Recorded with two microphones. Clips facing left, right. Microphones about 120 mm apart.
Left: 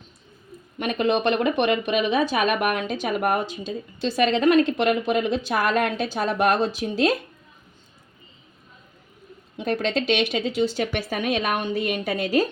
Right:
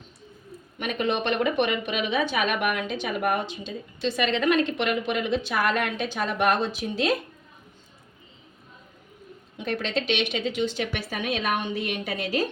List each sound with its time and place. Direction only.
0.8 s speech: 35° left (ahead or behind)
9.6 s speech: 40° left (ahead or behind)